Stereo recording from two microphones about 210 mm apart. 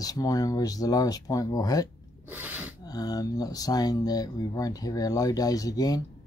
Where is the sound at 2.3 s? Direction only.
10° right (ahead or behind).